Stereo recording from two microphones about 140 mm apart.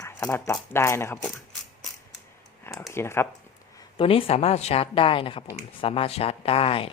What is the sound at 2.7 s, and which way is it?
Speech, 20° left (ahead or behind).